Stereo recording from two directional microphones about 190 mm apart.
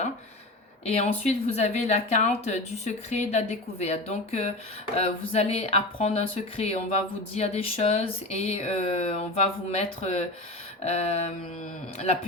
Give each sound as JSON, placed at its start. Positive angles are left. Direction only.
{"t": 0.9, "sound": "a woman's voice", "side_deg": 35}